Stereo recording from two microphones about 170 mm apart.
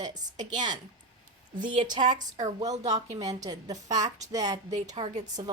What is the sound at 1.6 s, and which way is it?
Speech, 25° right (ahead or behind).